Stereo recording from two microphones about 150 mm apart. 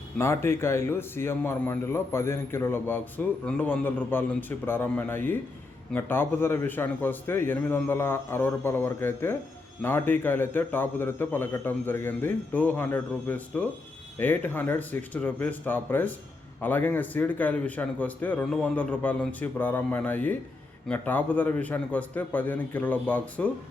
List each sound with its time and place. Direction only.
0.2 s a man's voice: 15° left (ahead or behind)